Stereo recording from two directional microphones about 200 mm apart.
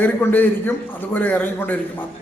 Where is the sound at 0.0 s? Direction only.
10° left (ahead or behind).